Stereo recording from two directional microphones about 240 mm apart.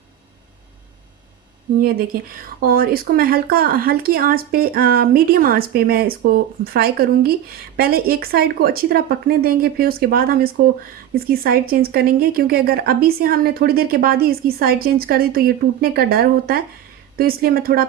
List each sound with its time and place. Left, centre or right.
1.8 s speech: right